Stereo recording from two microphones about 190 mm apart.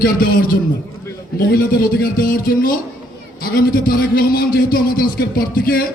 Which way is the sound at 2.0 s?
50° left (ahead or behind).